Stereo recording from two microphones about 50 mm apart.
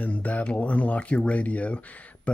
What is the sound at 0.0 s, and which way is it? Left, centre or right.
Speech, left.